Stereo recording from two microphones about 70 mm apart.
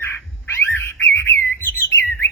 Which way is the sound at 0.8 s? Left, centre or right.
Left.